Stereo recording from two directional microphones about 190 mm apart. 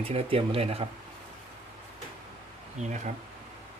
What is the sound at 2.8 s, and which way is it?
Speech, 40° right (ahead or behind).